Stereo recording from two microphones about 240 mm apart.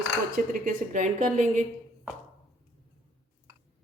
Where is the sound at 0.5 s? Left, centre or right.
Right.